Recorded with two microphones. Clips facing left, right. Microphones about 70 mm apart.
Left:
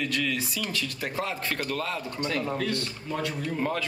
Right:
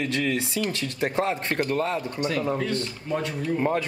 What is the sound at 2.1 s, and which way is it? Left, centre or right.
Speech, centre.